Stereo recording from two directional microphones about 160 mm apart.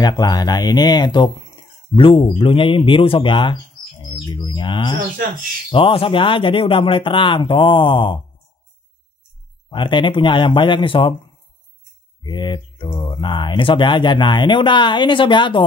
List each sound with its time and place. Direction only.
0.0 s speech: 25° left (ahead or behind)
9.7 s speech: 30° left (ahead or behind)
12.2 s speech: 30° left (ahead or behind)